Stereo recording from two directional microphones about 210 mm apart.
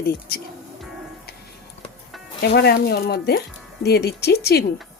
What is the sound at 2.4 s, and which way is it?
Speech, 50° left (ahead or behind).